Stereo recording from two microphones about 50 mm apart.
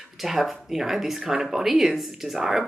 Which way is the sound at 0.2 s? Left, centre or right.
Centre.